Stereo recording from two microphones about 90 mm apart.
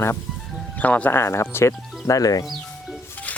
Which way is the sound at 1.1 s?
30° left (ahead or behind).